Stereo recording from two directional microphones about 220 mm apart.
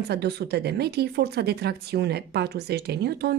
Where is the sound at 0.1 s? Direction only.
45° right (ahead or behind).